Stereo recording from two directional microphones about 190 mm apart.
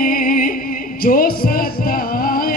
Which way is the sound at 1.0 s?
50° left (ahead or behind).